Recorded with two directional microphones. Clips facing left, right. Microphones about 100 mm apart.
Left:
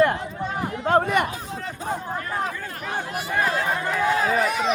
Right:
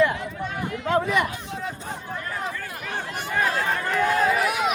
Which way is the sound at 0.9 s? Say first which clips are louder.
Left 2 dB; 50° left (ahead or behind).